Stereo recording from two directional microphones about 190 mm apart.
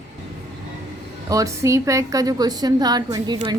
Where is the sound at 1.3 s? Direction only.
15° right (ahead or behind).